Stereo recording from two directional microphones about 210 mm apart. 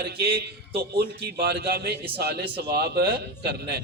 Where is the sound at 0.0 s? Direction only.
50° right (ahead or behind).